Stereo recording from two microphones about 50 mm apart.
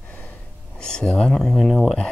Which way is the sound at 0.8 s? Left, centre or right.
Centre.